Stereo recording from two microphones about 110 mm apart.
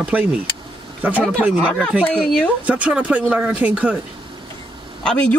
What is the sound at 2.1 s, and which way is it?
Speech, 10° left (ahead or behind).